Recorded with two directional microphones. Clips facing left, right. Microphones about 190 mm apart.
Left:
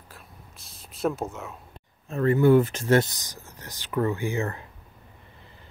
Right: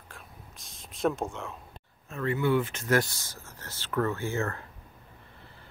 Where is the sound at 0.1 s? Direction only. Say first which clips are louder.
Right 1 dB; centre (ahead or behind).